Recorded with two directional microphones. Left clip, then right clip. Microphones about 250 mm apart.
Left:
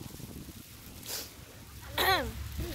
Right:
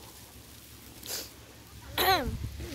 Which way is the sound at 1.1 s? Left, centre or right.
Right.